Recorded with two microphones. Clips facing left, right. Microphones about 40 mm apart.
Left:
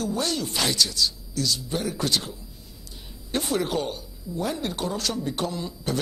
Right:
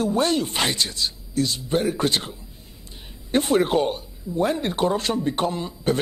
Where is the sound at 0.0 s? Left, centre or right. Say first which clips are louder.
Right 6 dB; right.